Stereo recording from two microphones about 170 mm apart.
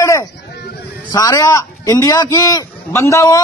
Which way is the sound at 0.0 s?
20° left (ahead or behind).